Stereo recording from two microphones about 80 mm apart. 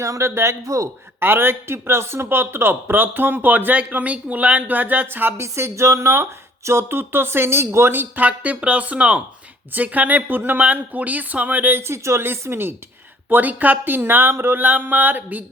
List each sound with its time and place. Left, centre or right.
0.0 s speech: right
1.2 s speech: right